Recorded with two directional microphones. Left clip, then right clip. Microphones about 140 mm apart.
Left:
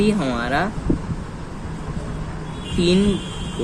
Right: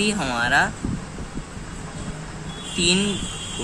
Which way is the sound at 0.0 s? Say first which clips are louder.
Left 1 dB; 50° right (ahead or behind).